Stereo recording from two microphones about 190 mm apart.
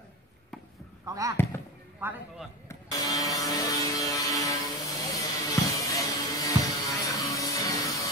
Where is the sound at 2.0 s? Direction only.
10° right (ahead or behind).